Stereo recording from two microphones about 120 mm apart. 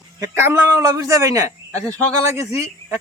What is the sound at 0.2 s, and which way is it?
A man's voice, 20° right (ahead or behind).